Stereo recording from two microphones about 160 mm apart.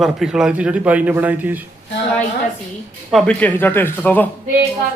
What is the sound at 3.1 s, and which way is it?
A man's voice, 10° left (ahead or behind).